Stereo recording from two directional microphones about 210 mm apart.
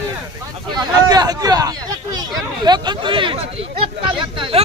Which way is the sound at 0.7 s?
20° right (ahead or behind).